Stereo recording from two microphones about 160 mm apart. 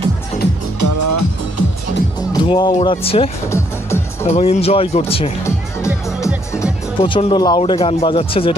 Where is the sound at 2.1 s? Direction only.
30° left (ahead or behind).